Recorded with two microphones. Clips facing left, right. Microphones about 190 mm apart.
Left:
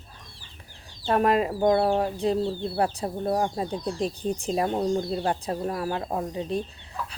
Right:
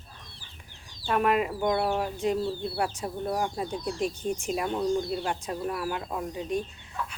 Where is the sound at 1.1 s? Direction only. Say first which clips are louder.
Left 3 dB; 35° left (ahead or behind).